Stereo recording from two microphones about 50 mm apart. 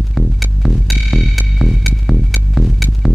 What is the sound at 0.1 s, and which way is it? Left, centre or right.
Music, centre.